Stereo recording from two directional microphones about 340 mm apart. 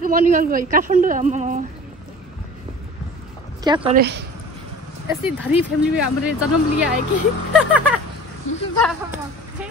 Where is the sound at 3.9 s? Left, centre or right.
Right.